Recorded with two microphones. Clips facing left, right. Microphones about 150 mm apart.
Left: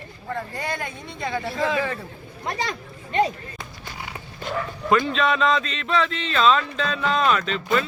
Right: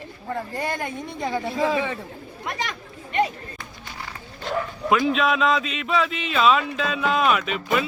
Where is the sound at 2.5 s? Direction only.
30° left (ahead or behind).